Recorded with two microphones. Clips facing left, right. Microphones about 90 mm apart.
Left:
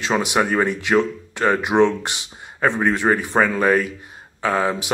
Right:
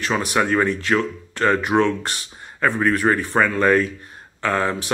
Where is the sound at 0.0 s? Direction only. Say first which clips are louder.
Left 1 dB; 20° left (ahead or behind).